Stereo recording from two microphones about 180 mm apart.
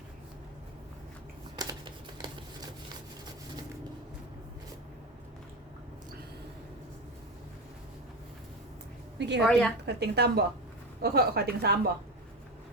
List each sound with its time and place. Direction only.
1.5 s computer keyboard: 25° right (ahead or behind)
9.1 s a woman's voice: 75° right (ahead or behind)
9.4 s a woman's voice: centre (ahead or behind)
9.8 s a woman's voice: 65° right (ahead or behind)